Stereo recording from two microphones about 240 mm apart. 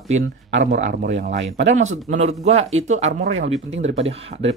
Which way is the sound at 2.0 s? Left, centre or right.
Right.